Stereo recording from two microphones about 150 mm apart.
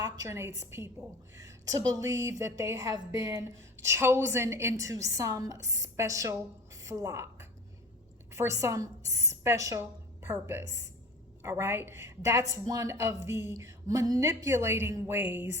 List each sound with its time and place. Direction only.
0.0 s a woman's voice: 20° right (ahead or behind)